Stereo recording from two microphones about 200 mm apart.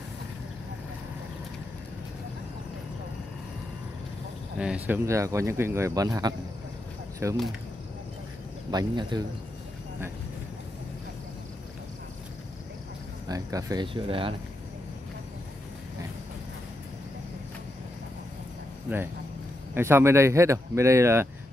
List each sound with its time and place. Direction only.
4.6 s speech: 5° right (ahead or behind)
8.7 s speech: 20° right (ahead or behind)
13.3 s speech: 15° right (ahead or behind)
19.7 s speech: 10° right (ahead or behind)